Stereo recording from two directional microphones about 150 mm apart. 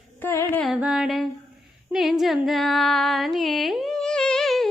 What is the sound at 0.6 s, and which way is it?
Carnatic music, 5° right (ahead or behind).